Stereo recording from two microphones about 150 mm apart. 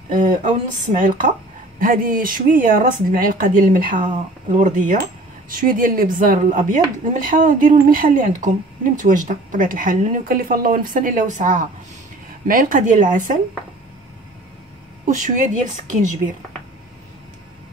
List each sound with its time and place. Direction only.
0.1 s speech: 60° right (ahead or behind)
15.0 s speech: 55° right (ahead or behind)